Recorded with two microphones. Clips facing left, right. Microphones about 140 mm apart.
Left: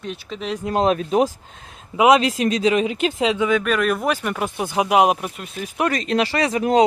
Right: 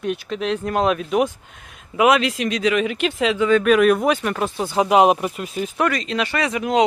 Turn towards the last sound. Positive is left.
turn(degrees=35)  # may be behind; listen again after turning